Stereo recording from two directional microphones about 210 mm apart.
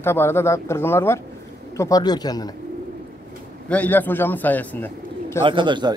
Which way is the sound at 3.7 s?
10° left (ahead or behind).